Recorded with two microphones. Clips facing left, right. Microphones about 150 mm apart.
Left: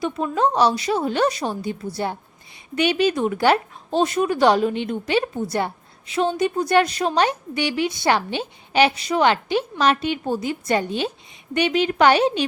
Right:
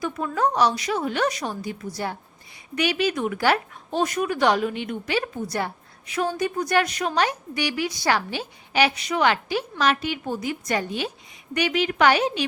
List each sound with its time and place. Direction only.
0.0 s a woman's voice: 25° left (ahead or behind)